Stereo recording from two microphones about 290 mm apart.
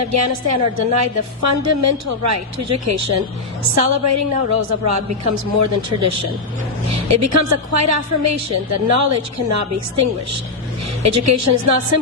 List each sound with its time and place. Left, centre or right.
0.0 s a woman's voice: right